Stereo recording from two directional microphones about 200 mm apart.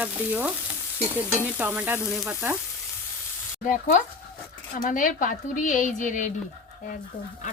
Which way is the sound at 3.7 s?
40° left (ahead or behind).